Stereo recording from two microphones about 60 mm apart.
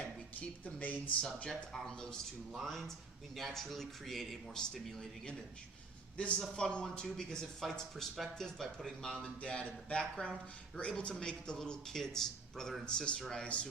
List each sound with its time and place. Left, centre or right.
0.0 s chopping: left
1.2 s speech: centre
6.2 s speech: centre